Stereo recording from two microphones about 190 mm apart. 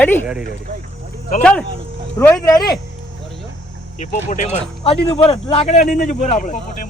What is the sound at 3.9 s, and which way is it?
A man's voice, 40° left (ahead or behind).